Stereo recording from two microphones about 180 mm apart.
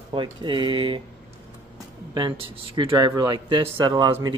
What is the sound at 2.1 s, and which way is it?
Speech, 30° right (ahead or behind).